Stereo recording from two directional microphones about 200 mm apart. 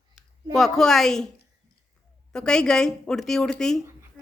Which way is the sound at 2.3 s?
5° left (ahead or behind).